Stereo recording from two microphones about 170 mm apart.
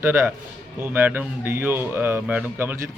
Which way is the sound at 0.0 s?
15° right (ahead or behind).